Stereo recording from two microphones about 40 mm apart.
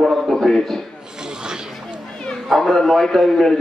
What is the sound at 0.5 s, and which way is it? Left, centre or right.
Speech, centre.